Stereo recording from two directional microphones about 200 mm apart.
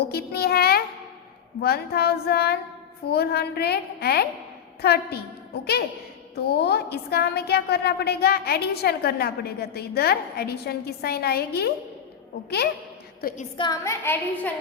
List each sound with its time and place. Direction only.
0.0 s a sound: 55° left (ahead or behind)
1.6 s speech: 50° left (ahead or behind)
6.3 s speech: 55° left (ahead or behind)
13.6 s a woman's voice: 15° left (ahead or behind)